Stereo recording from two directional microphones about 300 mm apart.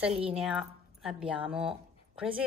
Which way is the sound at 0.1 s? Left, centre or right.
Centre.